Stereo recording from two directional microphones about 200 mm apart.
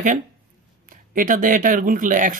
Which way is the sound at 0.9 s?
40° right (ahead or behind).